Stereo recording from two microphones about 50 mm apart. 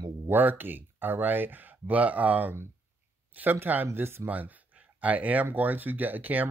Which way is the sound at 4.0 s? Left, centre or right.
Right.